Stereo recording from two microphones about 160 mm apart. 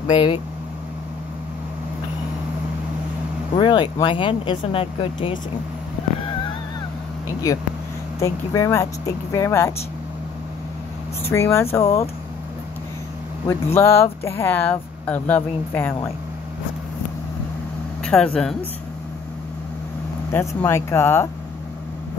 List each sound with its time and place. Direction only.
0.0 s speech: 30° left (ahead or behind)
3.5 s speech: 30° left (ahead or behind)
7.5 s speech: 25° left (ahead or behind)
11.2 s speech: 15° left (ahead or behind)
13.7 s speech: 15° left (ahead or behind)
18.0 s speech: 5° left (ahead or behind)
20.2 s speech: 15° left (ahead or behind)